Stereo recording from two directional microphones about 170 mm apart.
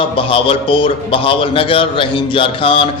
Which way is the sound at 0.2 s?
30° left (ahead or behind).